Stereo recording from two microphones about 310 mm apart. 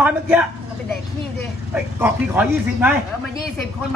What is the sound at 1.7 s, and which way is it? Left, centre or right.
Speech, centre.